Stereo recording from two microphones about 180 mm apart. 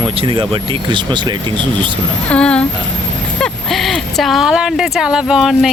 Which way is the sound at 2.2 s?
5° left (ahead or behind).